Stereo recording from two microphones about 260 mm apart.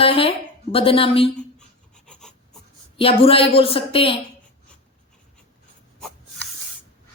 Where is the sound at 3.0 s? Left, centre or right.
Left.